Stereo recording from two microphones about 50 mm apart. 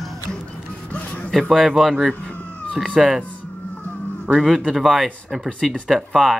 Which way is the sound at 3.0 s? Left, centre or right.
Centre.